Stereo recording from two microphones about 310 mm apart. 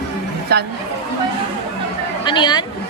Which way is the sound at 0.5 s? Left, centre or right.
Right.